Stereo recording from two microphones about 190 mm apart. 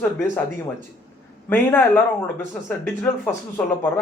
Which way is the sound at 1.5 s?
10° left (ahead or behind).